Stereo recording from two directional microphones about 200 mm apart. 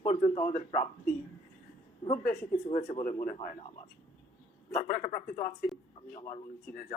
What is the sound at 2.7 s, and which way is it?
Speech, 30° left (ahead or behind).